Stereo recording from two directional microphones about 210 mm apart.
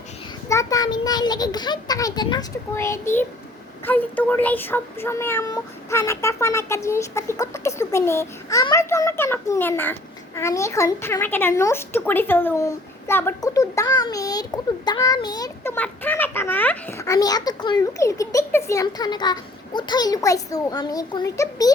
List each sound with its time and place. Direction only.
0.4 s a child's voice: 15° left (ahead or behind)